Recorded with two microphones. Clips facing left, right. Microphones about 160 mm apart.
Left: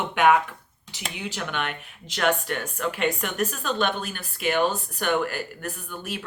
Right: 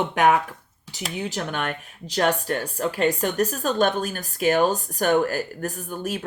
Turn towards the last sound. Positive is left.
turn(degrees=-45)  # may be behind; listen again after turning